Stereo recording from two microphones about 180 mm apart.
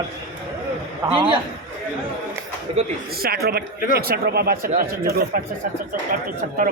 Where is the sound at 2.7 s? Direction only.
30° right (ahead or behind).